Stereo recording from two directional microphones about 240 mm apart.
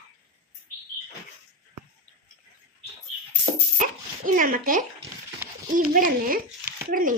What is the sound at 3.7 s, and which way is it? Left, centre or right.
Dog, right.